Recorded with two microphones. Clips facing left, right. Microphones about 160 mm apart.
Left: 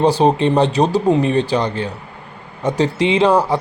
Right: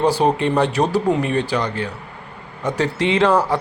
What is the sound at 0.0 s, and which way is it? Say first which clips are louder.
A man's voice: left 3 dB; 20° left (ahead or behind).